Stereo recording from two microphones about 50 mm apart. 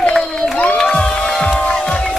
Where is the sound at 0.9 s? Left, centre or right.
Centre.